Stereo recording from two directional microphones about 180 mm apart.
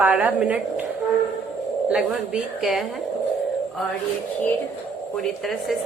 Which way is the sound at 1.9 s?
5° right (ahead or behind).